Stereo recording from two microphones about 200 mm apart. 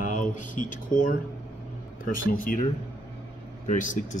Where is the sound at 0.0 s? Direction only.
40° left (ahead or behind).